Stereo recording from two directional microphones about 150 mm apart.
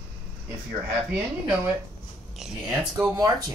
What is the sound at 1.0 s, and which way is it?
A woman's voice, 10° right (ahead or behind).